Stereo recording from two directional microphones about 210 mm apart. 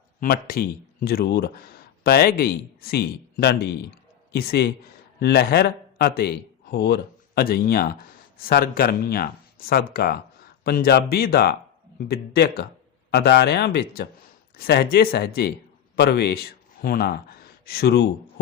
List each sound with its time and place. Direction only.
0.2 s a man's voice: 45° left (ahead or behind)